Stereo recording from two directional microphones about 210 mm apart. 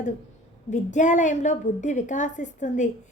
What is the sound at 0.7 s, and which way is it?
A woman's voice, 35° left (ahead or behind).